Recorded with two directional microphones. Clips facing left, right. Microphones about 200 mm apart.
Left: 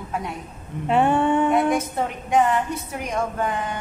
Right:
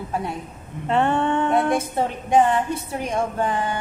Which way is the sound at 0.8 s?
10° left (ahead or behind).